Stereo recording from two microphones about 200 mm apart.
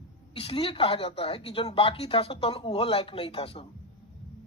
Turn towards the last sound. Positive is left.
turn(degrees=25)  # may be behind; listen again after turning